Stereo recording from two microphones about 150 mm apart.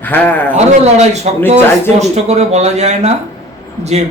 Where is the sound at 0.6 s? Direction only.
45° right (ahead or behind).